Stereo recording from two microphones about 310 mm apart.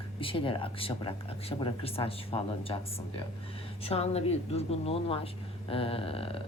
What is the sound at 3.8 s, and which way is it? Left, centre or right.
A woman's voice, centre.